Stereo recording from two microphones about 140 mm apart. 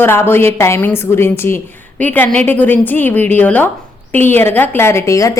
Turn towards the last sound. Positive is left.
turn(degrees=25)  # may be behind; listen again after turning